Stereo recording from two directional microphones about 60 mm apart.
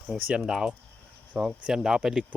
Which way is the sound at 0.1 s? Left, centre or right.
Centre.